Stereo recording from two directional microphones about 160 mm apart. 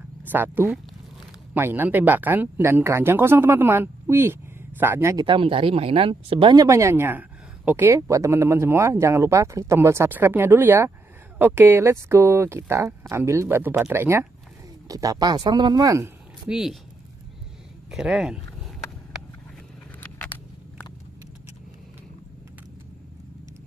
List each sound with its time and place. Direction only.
0.3 s speech: 10° right (ahead or behind)
5.2 s speech: 30° right (ahead or behind)
16.4 s speech: 5° right (ahead or behind)
17.9 s speech: 5° right (ahead or behind)